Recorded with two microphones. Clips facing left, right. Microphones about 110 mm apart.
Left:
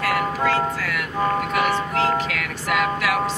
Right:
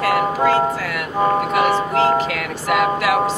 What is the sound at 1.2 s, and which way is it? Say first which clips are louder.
Music: right 5 dB; 15° right (ahead or behind).